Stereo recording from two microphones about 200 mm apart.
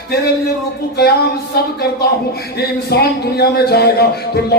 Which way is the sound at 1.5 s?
50° left (ahead or behind).